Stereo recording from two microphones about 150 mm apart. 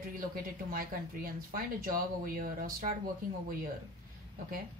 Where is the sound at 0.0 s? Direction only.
75° right (ahead or behind).